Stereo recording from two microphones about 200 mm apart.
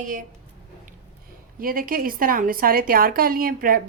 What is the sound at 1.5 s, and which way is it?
A woman's voice, 45° right (ahead or behind).